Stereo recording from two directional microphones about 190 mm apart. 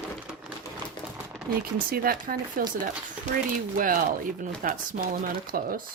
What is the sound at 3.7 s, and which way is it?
Speech, 45° right (ahead or behind).